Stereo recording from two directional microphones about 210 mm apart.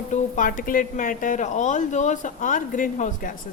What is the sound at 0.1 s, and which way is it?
A woman's voice, 40° left (ahead or behind).